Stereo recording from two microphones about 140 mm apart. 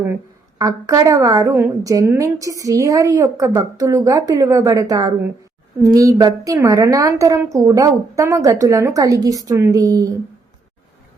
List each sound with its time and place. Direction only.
0.6 s a woman's voice: 25° right (ahead or behind)